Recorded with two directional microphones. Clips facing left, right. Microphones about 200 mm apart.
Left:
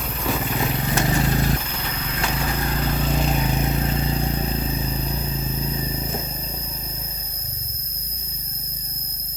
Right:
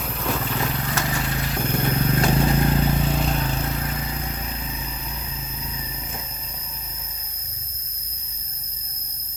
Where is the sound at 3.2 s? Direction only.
10° left (ahead or behind); by 7.0 s 35° left (ahead or behind).